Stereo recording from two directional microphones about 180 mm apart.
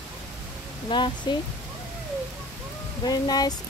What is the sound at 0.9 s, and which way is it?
Speech, 25° left (ahead or behind).